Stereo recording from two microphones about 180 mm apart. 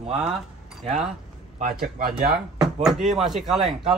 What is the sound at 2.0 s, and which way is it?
Speech, 55° right (ahead or behind).